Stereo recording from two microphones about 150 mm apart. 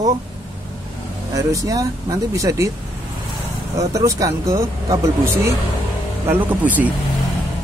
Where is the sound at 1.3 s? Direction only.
20° right (ahead or behind).